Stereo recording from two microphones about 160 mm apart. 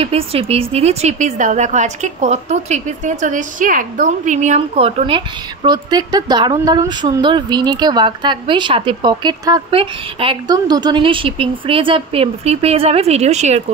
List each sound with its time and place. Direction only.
0.0 s a woman's voice: 35° right (ahead or behind)